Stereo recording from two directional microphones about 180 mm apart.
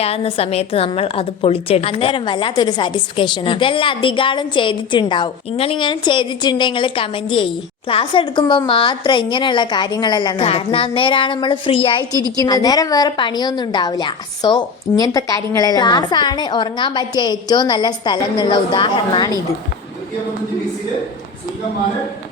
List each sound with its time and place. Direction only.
0.0 s a woman's voice: 35° left (ahead or behind)